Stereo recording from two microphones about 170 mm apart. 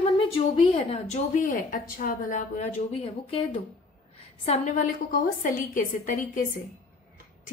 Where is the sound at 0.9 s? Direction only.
45° left (ahead or behind).